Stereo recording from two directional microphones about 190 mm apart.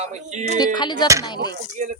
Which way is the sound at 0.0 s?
35° right (ahead or behind).